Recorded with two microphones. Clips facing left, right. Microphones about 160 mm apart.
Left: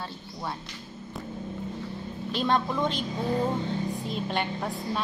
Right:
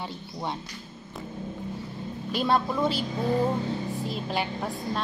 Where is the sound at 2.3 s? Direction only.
10° right (ahead or behind).